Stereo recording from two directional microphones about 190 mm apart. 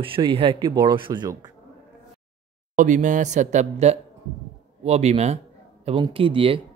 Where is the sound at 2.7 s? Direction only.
40° right (ahead or behind).